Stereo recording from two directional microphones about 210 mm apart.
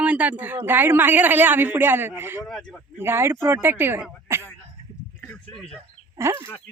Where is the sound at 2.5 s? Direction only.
5° left (ahead or behind).